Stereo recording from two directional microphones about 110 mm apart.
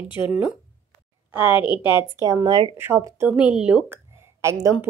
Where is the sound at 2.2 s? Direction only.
30° right (ahead or behind).